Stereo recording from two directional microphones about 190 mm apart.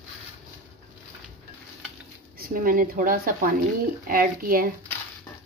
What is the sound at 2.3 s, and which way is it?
Speech, 50° right (ahead or behind).